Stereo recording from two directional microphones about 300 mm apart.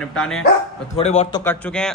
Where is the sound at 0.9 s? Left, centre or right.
Left.